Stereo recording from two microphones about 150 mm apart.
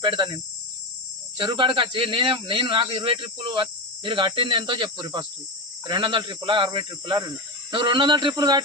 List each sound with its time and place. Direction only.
0.0 s speech: 30° right (ahead or behind)
1.4 s speech: 35° right (ahead or behind)